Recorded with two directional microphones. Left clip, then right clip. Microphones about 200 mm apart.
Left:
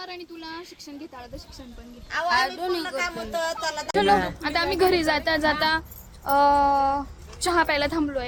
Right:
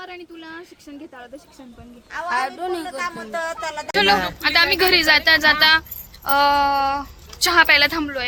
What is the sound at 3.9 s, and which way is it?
Speech, 15° left (ahead or behind).